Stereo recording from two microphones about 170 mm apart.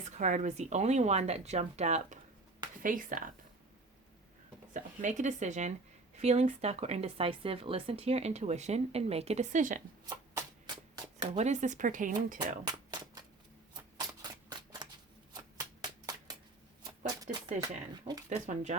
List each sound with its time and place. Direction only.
0.2 s speech: 45° right (ahead or behind)
2.8 s speech: 50° right (ahead or behind)
4.7 s speech: 45° right (ahead or behind)
10.9 s shuffling cards: 25° right (ahead or behind)
11.3 s speech: 45° right (ahead or behind)
12.6 s a sound: 25° right (ahead or behind)
13.7 s typewriter: 20° right (ahead or behind)
15.4 s a sound: 20° right (ahead or behind)
17.6 s speech: 25° right (ahead or behind)
18.3 s speech: 45° right (ahead or behind)